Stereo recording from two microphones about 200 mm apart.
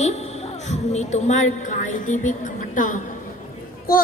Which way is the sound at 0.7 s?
35° left (ahead or behind).